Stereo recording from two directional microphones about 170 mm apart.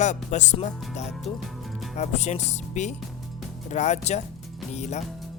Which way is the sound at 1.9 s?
45° left (ahead or behind).